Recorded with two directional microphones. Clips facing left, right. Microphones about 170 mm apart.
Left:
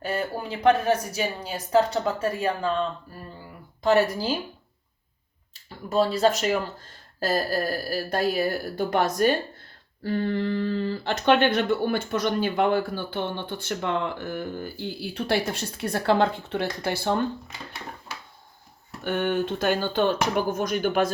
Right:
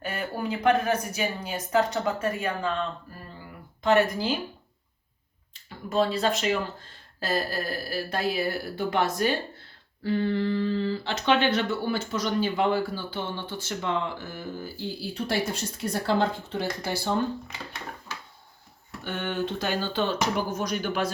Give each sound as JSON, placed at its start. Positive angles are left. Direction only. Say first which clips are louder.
{"t": 0.0, "sound": "speech", "louder": "left 2 dB", "side_deg": 35}
{"t": 5.9, "sound": "speech", "louder": "left 3 dB", "side_deg": 40}
{"t": 19.0, "sound": "speech", "louder": "left 5 dB", "side_deg": 55}